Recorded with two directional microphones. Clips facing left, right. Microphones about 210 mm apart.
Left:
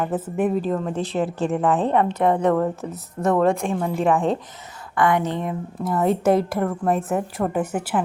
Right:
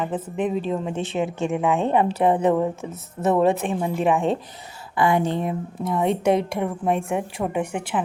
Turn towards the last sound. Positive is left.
turn(degrees=5)  # may be behind; listen again after turning